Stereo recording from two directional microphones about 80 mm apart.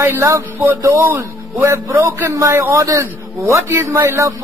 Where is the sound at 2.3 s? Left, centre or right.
Right.